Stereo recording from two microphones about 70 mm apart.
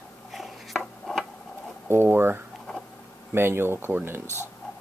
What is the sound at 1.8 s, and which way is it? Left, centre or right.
Speech, right.